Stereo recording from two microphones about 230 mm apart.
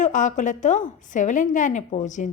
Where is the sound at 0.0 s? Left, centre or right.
Left.